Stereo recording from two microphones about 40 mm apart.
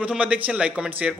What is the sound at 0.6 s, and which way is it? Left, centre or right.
Speech, centre.